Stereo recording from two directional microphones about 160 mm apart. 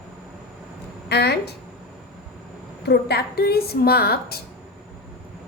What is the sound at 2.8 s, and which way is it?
A woman's voice, 90° left.